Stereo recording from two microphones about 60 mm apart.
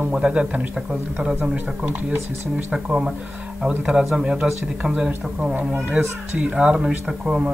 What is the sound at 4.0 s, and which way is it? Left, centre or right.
Speech, centre.